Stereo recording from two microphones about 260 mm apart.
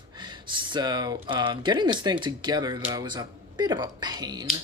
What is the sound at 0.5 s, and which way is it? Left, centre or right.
Speech, centre.